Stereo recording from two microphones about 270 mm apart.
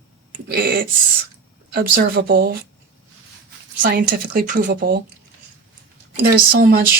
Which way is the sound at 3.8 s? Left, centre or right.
Right.